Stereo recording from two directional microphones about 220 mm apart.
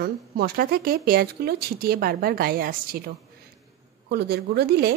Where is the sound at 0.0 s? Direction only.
45° right (ahead or behind).